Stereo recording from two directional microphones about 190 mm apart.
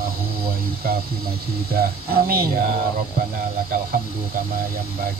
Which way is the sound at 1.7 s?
50° right (ahead or behind).